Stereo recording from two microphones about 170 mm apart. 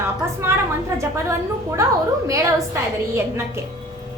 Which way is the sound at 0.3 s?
15° right (ahead or behind).